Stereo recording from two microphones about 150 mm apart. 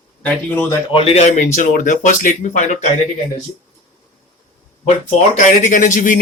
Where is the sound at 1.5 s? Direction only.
60° left (ahead or behind).